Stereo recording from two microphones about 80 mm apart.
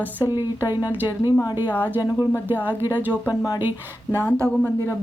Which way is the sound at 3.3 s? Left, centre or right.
Left.